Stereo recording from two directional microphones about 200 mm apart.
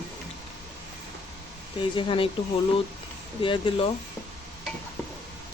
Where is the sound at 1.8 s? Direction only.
25° left (ahead or behind).